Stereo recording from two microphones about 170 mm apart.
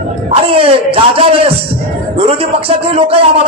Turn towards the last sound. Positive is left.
turn(degrees=-35)  # may be behind; listen again after turning